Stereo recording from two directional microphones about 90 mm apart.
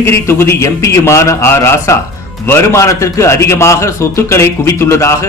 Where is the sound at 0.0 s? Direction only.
30° left (ahead or behind).